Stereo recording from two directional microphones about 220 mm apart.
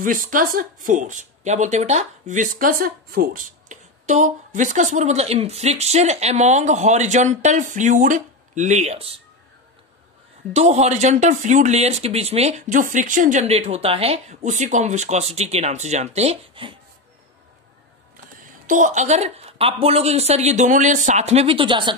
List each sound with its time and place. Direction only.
0.0 s speech: 40° right (ahead or behind)
10.5 s speech: 30° right (ahead or behind)
18.7 s speech: 35° right (ahead or behind)